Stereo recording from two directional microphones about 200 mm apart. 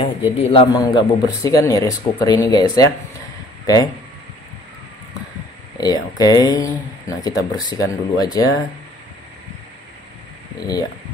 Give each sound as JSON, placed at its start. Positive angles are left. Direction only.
{"t": 0.0, "sound": "a man's voice", "side_deg": 25}
{"t": 5.8, "sound": "speech", "side_deg": 20}